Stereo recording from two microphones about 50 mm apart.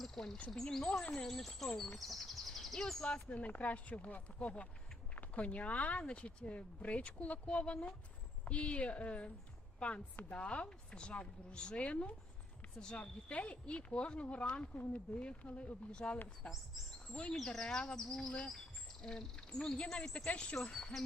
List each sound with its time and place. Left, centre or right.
0.0 s a sound: centre
0.5 s speech: centre
3.0 s speech: left
17.3 s speech: centre